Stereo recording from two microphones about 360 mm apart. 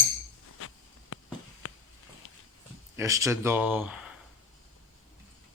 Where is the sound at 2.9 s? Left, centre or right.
Centre.